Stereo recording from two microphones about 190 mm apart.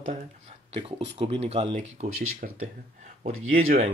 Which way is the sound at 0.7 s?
30° right (ahead or behind).